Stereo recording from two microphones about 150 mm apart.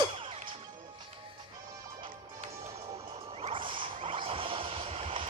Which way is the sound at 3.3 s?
40° right (ahead or behind).